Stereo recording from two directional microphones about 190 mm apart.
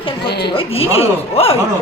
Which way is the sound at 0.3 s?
60° left (ahead or behind).